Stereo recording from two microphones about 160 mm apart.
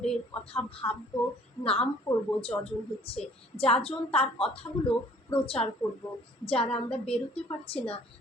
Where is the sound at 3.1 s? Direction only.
35° left (ahead or behind).